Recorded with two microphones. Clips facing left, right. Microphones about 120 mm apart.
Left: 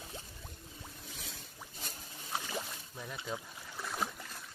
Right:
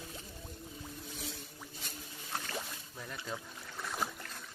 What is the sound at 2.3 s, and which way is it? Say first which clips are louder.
Boat: left 1 dB; 10° left (ahead or behind).